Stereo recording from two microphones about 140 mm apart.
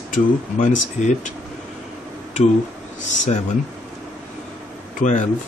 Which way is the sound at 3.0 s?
60° left (ahead or behind).